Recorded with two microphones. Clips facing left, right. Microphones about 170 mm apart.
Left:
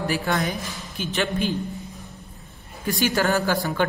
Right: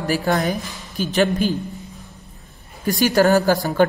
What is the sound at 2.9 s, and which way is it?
Speech, 40° right (ahead or behind).